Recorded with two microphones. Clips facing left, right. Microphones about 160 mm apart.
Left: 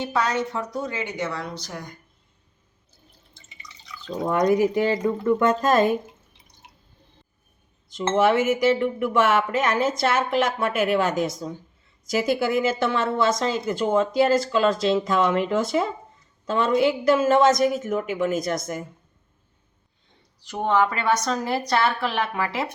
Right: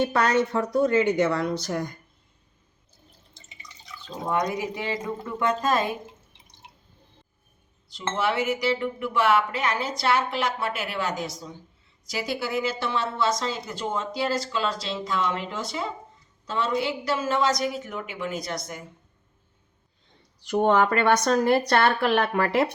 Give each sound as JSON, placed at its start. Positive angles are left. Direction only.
{"t": 0.0, "sound": "speech", "side_deg": -55}
{"t": 4.3, "sound": "a woman's voice", "side_deg": 45}
{"t": 7.9, "sound": "a woman's voice", "side_deg": 50}
{"t": 20.6, "sound": "speech", "side_deg": -55}